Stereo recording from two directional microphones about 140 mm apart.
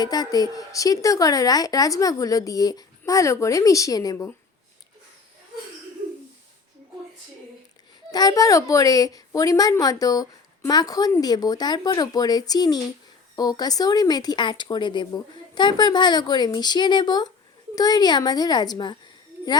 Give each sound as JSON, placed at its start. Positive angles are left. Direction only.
{"t": 0.0, "sound": "a woman's voice", "side_deg": 30}
{"t": 8.1, "sound": "a woman's voice", "side_deg": 25}